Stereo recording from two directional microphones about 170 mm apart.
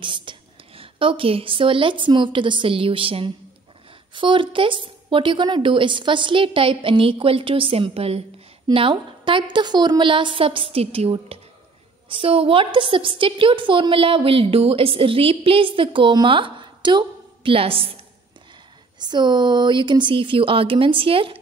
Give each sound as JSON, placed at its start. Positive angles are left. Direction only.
{"t": 0.0, "sound": "a woman's voice", "side_deg": -30}
{"t": 18.9, "sound": "speech", "side_deg": -25}